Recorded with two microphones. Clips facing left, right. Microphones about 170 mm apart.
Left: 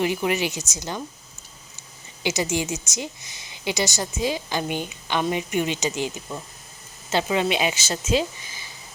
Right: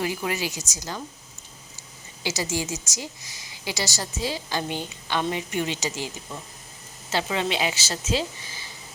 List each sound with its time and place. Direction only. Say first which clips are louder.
0.0 s a woman's voice: left 4 dB; 20° left (ahead or behind)
2.2 s a woman's voice: left 4 dB; 20° left (ahead or behind)
7.1 s a woman's voice: left 4 dB; 20° left (ahead or behind)